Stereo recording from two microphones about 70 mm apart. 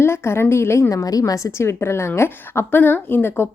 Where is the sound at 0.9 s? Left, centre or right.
Left.